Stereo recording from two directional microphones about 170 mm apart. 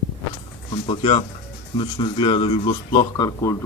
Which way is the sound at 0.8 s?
30° left (ahead or behind).